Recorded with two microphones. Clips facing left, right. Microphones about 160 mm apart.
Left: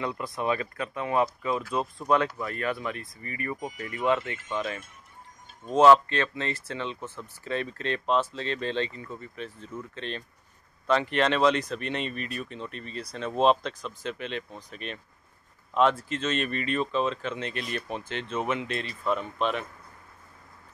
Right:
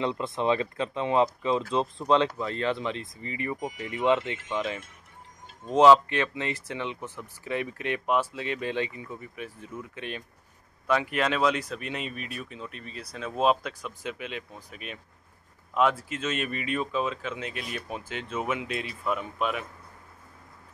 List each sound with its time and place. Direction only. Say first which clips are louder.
0.0 s speech: right 3 dB; 25° right (ahead or behind); by 19.6 s 10° right (ahead or behind)